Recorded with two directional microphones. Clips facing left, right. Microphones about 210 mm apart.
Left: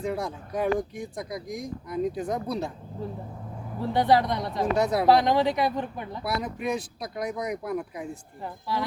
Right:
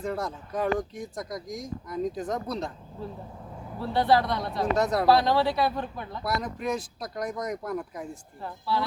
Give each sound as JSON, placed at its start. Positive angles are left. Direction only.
{"t": 0.0, "sound": "speech", "side_deg": 10}
{"t": 3.8, "sound": "speech", "side_deg": 15}
{"t": 4.8, "sound": "speech", "side_deg": 5}
{"t": 5.0, "sound": "speech", "side_deg": 15}
{"t": 6.2, "sound": "speech", "side_deg": 5}